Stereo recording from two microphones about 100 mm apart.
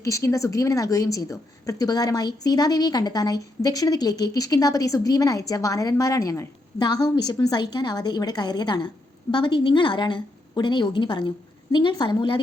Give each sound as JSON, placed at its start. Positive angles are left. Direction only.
{"t": 0.0, "sound": "a woman's voice", "side_deg": 30}
{"t": 6.7, "sound": "a woman's voice", "side_deg": 45}